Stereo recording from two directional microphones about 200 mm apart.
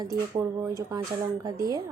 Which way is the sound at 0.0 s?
15° right (ahead or behind).